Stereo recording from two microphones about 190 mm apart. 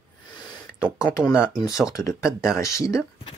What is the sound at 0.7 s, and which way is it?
Speech, 5° right (ahead or behind).